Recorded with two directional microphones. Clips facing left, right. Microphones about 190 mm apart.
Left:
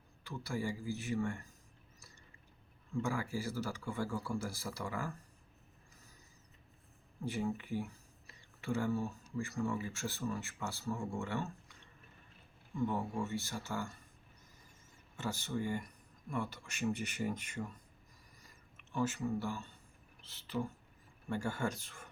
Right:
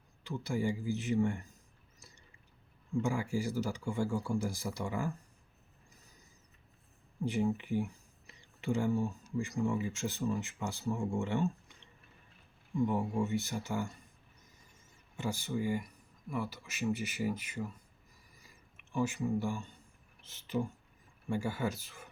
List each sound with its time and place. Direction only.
0.3 s a man's voice: 20° right (ahead or behind)
2.9 s speech: 15° right (ahead or behind)
7.3 s speech: 20° right (ahead or behind)
12.7 s speech: 15° right (ahead or behind)
15.1 s speech: 15° right (ahead or behind)
18.3 s a sound: 10° right (ahead or behind)
20.2 s a man's voice: 20° right (ahead or behind)